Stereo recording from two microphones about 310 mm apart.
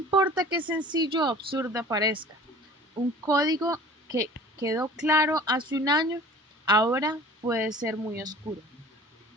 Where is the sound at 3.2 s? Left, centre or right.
Centre.